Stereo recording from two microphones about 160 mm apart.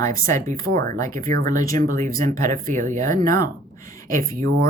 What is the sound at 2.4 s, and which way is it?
Speech, 20° left (ahead or behind).